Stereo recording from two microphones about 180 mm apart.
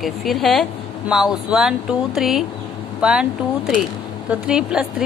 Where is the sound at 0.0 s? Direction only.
Centre (ahead or behind).